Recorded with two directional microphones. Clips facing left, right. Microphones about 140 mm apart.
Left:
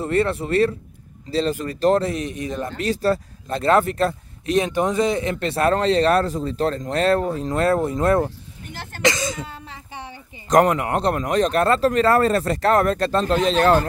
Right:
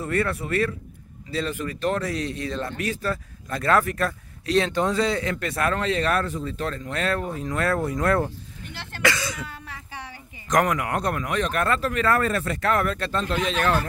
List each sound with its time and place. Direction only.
0.0 s speech: 25° left (ahead or behind)
2.8 s speech: 30° left (ahead or behind)